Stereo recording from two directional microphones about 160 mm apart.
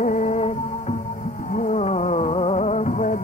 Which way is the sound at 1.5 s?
45° left (ahead or behind).